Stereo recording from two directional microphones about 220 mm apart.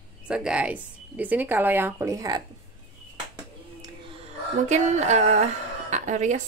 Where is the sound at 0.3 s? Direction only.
5° right (ahead or behind).